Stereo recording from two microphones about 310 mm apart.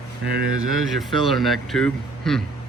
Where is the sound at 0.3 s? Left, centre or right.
Right.